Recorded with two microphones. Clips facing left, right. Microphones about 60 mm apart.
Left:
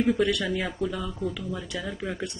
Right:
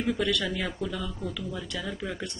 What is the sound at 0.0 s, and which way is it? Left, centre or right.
Speech, centre.